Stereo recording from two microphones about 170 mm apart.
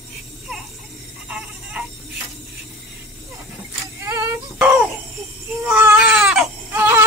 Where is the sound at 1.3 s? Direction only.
5° right (ahead or behind).